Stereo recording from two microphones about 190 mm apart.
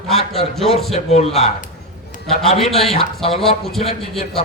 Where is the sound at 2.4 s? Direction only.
Centre (ahead or behind).